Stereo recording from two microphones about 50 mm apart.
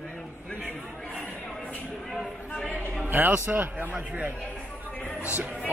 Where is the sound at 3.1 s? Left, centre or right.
Right.